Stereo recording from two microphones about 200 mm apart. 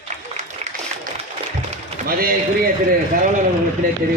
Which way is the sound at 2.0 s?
45° right (ahead or behind).